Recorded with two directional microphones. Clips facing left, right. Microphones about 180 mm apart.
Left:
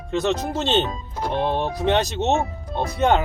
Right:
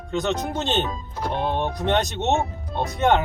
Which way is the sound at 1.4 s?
Centre (ahead or behind).